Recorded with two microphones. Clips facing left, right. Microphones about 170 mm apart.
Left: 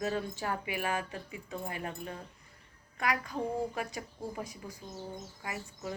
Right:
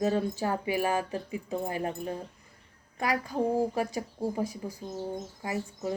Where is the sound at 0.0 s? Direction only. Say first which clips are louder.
Right 6 dB; 30° right (ahead or behind).